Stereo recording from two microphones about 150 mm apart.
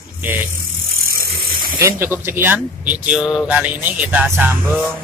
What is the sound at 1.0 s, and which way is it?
Bicycle, 80° right.